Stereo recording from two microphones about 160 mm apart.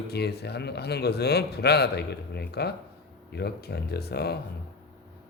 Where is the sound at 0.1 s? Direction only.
90° left.